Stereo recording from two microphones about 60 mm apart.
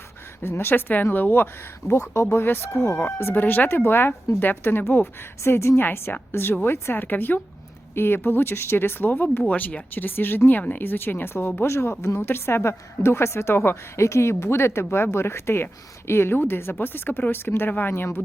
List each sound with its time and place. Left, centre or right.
0.4 s speech: left
1.9 s speech: left
3.3 s speech: left
5.4 s speech: left
11.7 s speech: left